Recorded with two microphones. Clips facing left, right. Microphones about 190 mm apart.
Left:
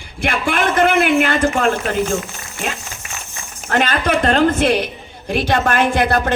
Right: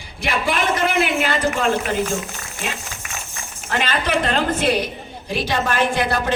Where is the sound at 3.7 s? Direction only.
50° left (ahead or behind).